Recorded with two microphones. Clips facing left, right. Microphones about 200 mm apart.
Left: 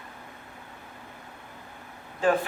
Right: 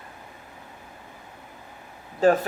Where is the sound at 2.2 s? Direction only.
40° right (ahead or behind).